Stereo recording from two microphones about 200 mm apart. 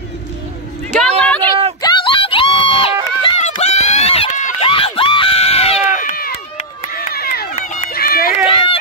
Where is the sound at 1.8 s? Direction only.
25° left (ahead or behind).